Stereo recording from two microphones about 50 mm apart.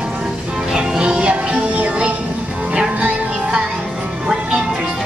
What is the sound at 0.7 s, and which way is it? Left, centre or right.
Music, centre.